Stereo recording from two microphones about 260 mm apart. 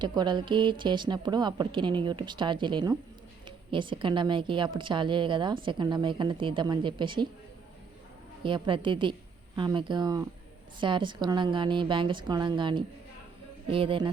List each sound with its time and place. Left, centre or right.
0.0 s a woman's voice: centre
8.4 s a woman's voice: centre